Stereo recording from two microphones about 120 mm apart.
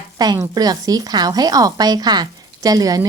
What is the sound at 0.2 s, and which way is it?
Speech, 35° right (ahead or behind).